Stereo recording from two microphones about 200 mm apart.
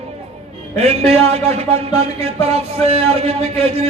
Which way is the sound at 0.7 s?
30° right (ahead or behind).